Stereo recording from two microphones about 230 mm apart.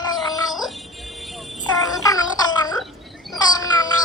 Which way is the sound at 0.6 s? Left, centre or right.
Centre.